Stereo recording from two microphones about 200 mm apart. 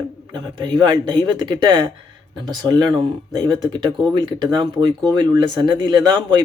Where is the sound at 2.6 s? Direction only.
20° right (ahead or behind).